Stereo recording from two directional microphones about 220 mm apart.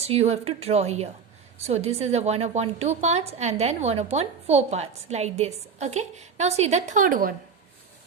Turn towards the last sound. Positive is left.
turn(degrees=-35)  # may be behind; listen again after turning